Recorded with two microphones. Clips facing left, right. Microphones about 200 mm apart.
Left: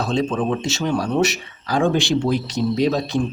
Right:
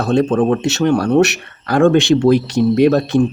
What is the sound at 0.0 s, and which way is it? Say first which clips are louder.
Speech: right 7 dB; 65° right (ahead or behind).